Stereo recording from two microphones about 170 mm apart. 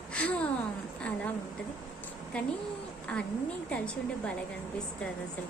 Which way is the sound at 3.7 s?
5° left (ahead or behind).